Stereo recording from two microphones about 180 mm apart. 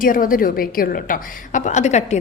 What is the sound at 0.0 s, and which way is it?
A woman's voice, 50° left (ahead or behind).